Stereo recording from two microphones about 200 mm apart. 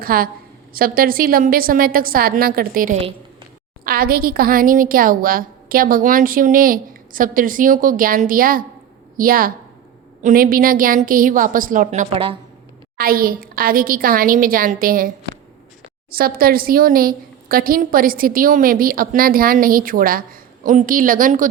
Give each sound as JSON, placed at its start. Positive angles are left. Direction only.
{"t": 0.0, "sound": "a woman's voice", "side_deg": -45}
{"t": 13.0, "sound": "a woman's voice", "side_deg": -45}
{"t": 16.1, "sound": "a woman's voice", "side_deg": -50}